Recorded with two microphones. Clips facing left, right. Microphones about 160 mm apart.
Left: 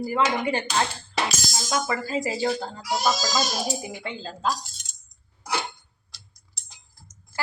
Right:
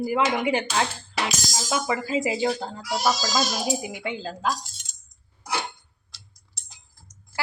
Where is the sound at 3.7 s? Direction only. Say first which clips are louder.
Right 3 dB; 10° right (ahead or behind).